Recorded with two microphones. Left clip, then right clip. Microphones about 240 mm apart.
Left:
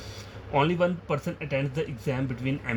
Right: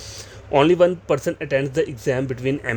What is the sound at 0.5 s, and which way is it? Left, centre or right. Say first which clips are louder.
Speech: right 9 dB; right.